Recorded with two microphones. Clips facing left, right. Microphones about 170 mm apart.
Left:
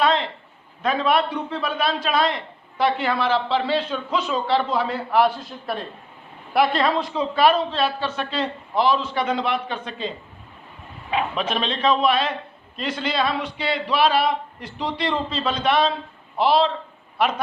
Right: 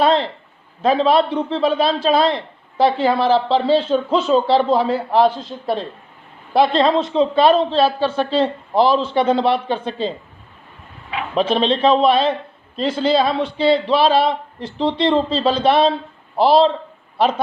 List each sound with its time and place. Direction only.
0.0 s a sound: 35° right (ahead or behind)
0.8 s a man's voice: 30° right (ahead or behind)
11.3 s a man's voice: 30° right (ahead or behind)